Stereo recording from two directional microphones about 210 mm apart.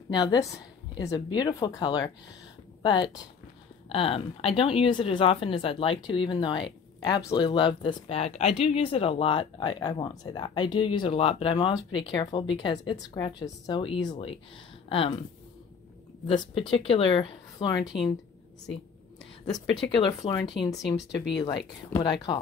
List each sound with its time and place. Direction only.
0.1 s speech: 20° left (ahead or behind)
16.3 s speech: 25° left (ahead or behind)
17.8 s speech: centre (ahead or behind)
19.5 s speech: 20° left (ahead or behind)